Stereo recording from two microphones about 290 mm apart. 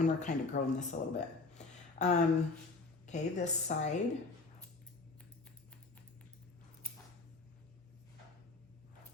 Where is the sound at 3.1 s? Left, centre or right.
Left.